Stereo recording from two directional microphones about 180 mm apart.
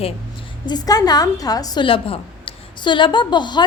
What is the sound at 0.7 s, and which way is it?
A woman's voice, 20° left (ahead or behind).